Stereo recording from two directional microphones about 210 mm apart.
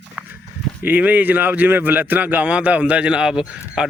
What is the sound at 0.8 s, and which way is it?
Speech, 10° right (ahead or behind).